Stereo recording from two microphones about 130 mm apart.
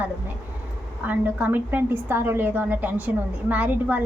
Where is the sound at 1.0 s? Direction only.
15° right (ahead or behind).